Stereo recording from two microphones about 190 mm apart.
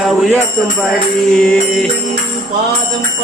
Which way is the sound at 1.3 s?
5° left (ahead or behind).